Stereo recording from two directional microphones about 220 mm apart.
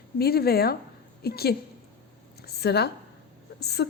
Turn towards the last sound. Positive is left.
turn(degrees=50)  # may be behind; listen again after turning